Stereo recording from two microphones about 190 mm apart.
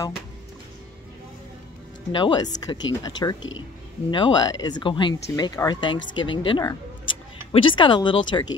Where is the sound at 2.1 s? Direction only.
25° left (ahead or behind).